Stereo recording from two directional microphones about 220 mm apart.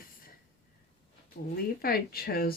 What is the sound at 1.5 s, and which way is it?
Speech, 45° left (ahead or behind).